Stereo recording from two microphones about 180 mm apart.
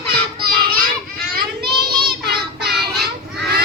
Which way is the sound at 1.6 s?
60° right (ahead or behind).